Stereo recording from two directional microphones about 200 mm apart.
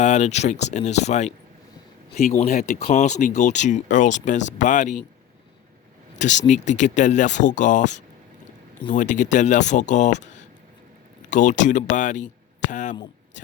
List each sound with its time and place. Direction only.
0.0 s speech: 35° left (ahead or behind)
6.1 s speech: 35° left (ahead or behind)